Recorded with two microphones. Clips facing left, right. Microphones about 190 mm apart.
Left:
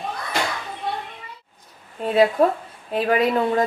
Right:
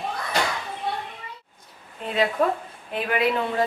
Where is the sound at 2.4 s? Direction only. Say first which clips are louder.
Left 4 dB; 35° left (ahead or behind).